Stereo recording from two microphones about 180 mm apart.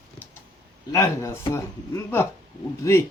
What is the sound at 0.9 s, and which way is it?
Speech, 15° left (ahead or behind).